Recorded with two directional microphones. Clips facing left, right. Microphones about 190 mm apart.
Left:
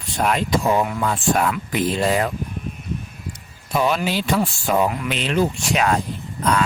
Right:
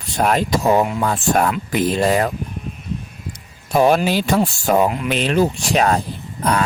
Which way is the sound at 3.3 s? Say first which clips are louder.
Right 6 dB; 45° right (ahead or behind).